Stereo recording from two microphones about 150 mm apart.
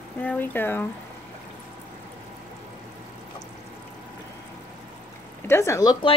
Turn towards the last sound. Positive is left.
turn(degrees=20)  # may be behind; listen again after turning